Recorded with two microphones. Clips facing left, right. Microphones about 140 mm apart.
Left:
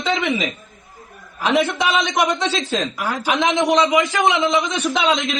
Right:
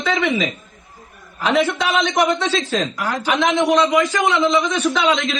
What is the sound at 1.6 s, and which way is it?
Speech, 15° left (ahead or behind).